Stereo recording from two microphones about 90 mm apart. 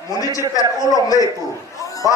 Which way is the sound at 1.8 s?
40° left (ahead or behind).